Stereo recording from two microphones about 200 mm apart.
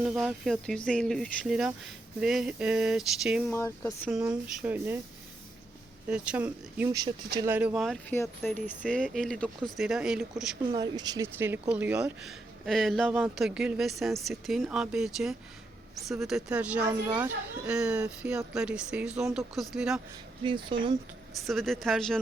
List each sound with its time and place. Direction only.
0.0 s speech: 5° right (ahead or behind)
3.5 s speech: 10° left (ahead or behind)
4.1 s speech: 5° right (ahead or behind)
6.1 s speech: 5° right (ahead or behind)
10.7 s speech: 20° right (ahead or behind); by 20.0 s centre (ahead or behind)
20.4 s speech: 25° right (ahead or behind)
21.4 s speech: centre (ahead or behind)